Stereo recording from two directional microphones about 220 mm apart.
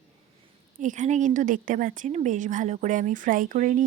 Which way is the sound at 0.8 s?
35° right (ahead or behind).